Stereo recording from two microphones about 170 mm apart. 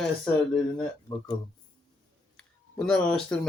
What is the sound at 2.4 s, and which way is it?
Speech, 5° left (ahead or behind).